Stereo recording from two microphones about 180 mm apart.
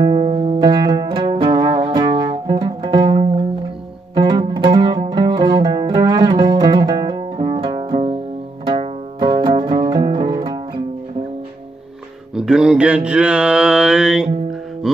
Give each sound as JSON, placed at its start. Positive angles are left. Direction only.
{"t": 0.0, "sound": "music", "side_deg": -30}
{"t": 0.6, "sound": "music", "side_deg": -25}
{"t": 12.4, "sound": "mantra", "side_deg": -5}